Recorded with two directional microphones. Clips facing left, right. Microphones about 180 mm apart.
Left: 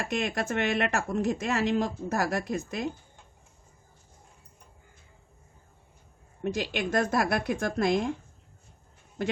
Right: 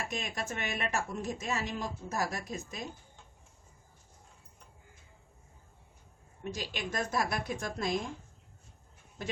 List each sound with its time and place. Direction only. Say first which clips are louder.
0.1 s a woman's voice: left 8 dB; 70° left (ahead or behind)
6.4 s a woman's voice: left 8 dB; 65° left (ahead or behind)